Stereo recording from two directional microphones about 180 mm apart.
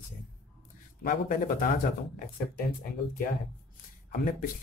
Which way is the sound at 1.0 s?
50° left (ahead or behind).